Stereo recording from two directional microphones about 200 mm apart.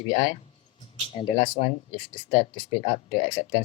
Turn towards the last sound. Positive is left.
turn(degrees=25)  # may be behind; listen again after turning